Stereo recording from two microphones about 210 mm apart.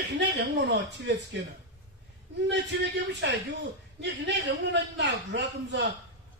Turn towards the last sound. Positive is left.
turn(degrees=-55)  # may be behind; listen again after turning